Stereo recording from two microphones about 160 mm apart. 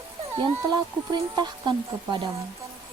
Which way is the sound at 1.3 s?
25° right (ahead or behind).